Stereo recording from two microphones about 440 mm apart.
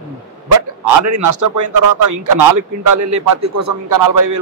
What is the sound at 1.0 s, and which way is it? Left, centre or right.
A man's voice, right.